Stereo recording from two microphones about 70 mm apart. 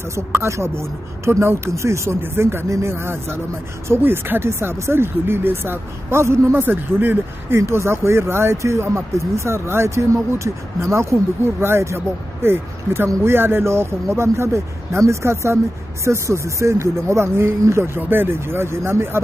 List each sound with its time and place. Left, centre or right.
0.1 s speech: right